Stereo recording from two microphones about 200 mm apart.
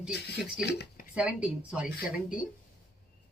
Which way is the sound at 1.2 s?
5° right (ahead or behind).